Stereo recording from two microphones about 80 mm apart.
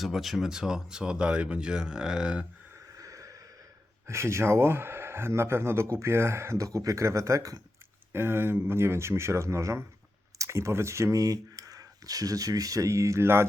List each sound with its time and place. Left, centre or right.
0.0 s speech: centre
2.7 s a sound: right
4.0 s speech: right
8.1 s speech: right